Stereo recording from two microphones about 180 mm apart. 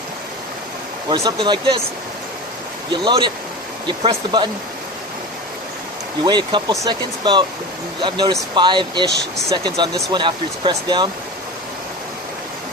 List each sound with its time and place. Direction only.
1.0 s speech: 20° right (ahead or behind)
2.9 s speech: 25° right (ahead or behind)
6.2 s speech: 25° right (ahead or behind)